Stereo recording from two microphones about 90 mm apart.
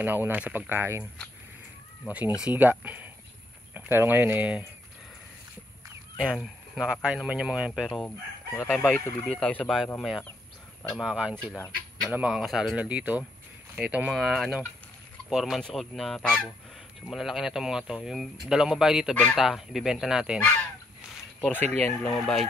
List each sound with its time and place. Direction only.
0.0 s speech: 20° right (ahead or behind)
2.0 s speech: 15° right (ahead or behind)
6.2 s speech: centre (ahead or behind)
6.9 s speech: 10° right (ahead or behind)
8.8 s speech: 15° left (ahead or behind)
9.9 s speech: centre (ahead or behind)
12.7 s speech: 15° right (ahead or behind)
20.3 s speech: 20° left (ahead or behind)
22.1 s speech: 5° left (ahead or behind)